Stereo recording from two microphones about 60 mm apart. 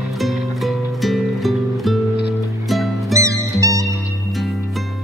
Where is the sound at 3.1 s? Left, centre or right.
Right.